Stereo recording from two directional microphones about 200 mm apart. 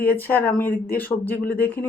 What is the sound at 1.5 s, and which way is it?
Speech, 50° left (ahead or behind).